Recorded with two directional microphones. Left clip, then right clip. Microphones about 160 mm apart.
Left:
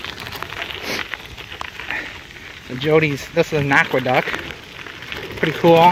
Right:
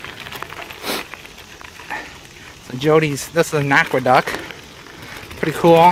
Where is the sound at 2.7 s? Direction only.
35° right (ahead or behind).